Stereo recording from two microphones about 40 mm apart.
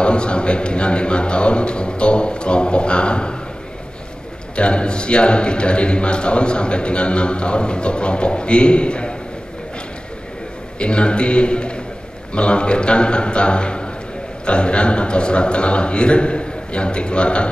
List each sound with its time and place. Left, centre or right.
0.0 s a man's voice: left
4.6 s a man's voice: left
10.8 s a man's voice: left